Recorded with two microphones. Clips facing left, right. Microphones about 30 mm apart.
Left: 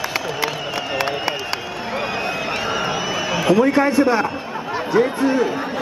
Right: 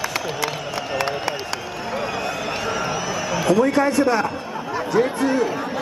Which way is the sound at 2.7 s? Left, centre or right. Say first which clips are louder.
Left 2 dB; centre.